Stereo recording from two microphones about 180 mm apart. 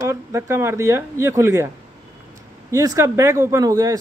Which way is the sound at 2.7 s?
20° right (ahead or behind).